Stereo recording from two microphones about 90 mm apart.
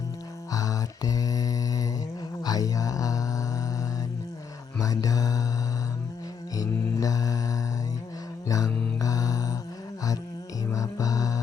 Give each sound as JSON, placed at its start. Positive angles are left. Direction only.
{"t": 0.5, "sound": "mantra", "side_deg": 40}
{"t": 4.8, "sound": "mantra", "side_deg": 40}
{"t": 6.6, "sound": "mantra", "side_deg": 40}
{"t": 10.7, "sound": "music", "side_deg": 40}